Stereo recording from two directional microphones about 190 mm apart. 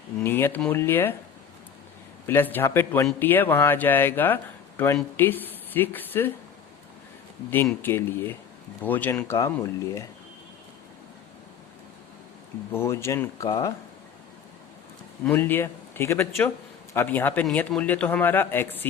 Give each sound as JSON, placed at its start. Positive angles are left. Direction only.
{"t": 0.2, "sound": "a man's voice", "side_deg": 10}
{"t": 2.2, "sound": "a man's voice", "side_deg": 10}
{"t": 7.5, "sound": "a man's voice", "side_deg": 10}
{"t": 12.7, "sound": "a man's voice", "side_deg": 15}
{"t": 15.2, "sound": "a man's voice", "side_deg": 10}